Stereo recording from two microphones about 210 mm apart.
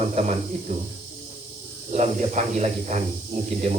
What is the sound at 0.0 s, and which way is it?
Speech, 30° right (ahead or behind).